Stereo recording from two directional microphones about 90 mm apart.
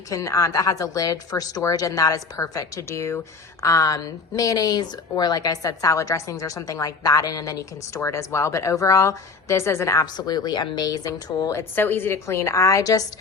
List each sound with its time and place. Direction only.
0.1 s a woman's voice: 40° left (ahead or behind)
10.2 s speech: 50° left (ahead or behind)
11.7 s a woman's voice: 20° left (ahead or behind); by 13.1 s 40° left (ahead or behind)